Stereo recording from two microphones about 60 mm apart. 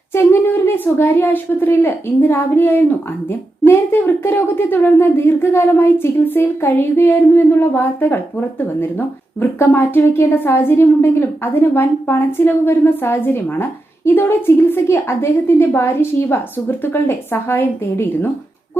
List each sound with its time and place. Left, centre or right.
0.1 s a woman's voice: left